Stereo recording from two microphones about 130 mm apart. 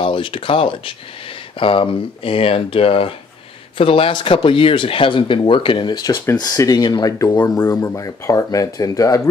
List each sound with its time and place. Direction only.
0.0 s speech: 40° left (ahead or behind)